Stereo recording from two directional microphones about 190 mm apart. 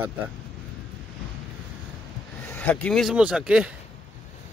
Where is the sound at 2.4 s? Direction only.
10° left (ahead or behind).